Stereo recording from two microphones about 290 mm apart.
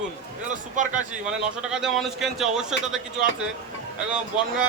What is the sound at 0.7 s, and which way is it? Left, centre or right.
Speech, right.